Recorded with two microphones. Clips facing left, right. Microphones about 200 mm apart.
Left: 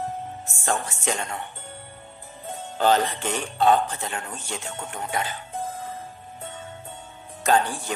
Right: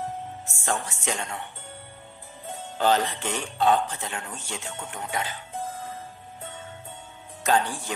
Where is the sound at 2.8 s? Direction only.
45° left (ahead or behind).